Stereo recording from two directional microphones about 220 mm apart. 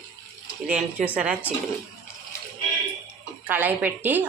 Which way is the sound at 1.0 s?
5° right (ahead or behind).